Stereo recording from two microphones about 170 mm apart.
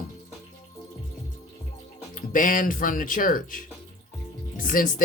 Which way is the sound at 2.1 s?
50° left (ahead or behind).